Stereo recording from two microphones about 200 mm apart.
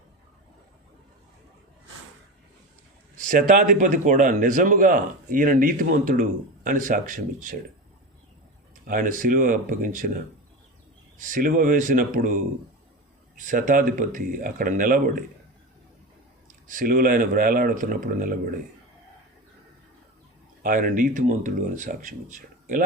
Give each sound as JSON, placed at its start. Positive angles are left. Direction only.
{"t": 3.2, "sound": "a man's voice", "side_deg": -45}
{"t": 8.9, "sound": "speech", "side_deg": -40}
{"t": 11.2, "sound": "a man's voice", "side_deg": -40}
{"t": 16.6, "sound": "speech", "side_deg": -45}
{"t": 20.6, "sound": "a man's voice", "side_deg": -45}